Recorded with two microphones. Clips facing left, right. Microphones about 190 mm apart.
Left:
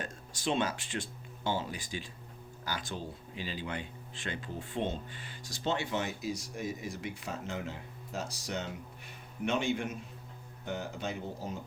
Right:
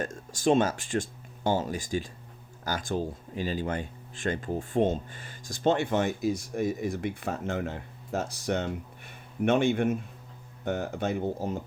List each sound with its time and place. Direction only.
0.0 s speech: 45° right (ahead or behind)